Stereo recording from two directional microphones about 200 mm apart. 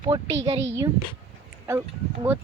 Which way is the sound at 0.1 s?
20° right (ahead or behind).